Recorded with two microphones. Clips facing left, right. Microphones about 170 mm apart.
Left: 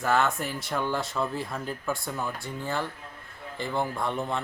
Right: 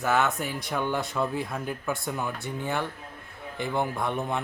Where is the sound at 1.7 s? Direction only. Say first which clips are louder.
Right 1 dB; 20° right (ahead or behind).